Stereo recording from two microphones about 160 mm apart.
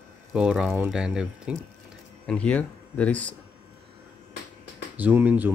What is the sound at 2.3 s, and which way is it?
Speech, 5° left (ahead or behind).